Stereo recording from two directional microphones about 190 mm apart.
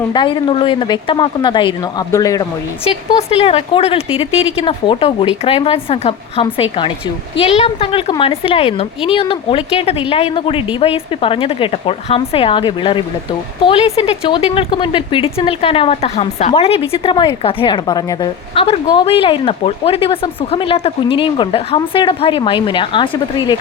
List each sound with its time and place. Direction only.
0.1 s a woman's voice: 25° left (ahead or behind)
3.2 s a woman's voice: 30° left (ahead or behind)